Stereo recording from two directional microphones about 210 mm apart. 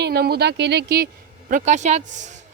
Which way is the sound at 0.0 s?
50° right (ahead or behind).